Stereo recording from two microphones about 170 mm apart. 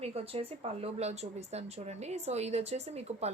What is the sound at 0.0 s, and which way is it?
Speech, 40° right (ahead or behind).